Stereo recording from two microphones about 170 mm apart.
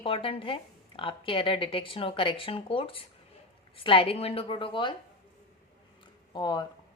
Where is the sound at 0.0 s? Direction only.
30° left (ahead or behind).